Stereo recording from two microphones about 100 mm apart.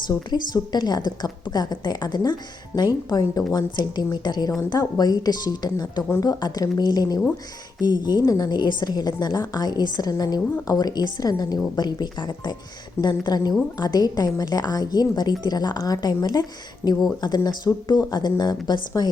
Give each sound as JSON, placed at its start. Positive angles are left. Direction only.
{"t": 0.3, "sound": "a woman's voice", "side_deg": 45}